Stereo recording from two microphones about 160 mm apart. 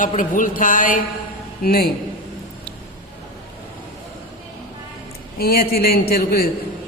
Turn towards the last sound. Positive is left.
turn(degrees=70)  # may be behind; listen again after turning